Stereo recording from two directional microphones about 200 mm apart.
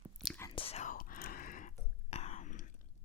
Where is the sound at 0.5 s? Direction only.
30° left (ahead or behind).